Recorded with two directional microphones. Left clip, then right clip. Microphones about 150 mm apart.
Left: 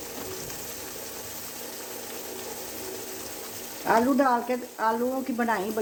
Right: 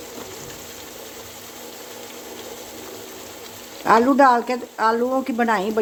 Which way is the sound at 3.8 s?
45° right (ahead or behind).